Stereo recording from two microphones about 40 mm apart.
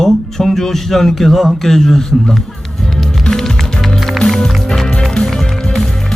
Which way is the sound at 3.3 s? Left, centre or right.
Centre.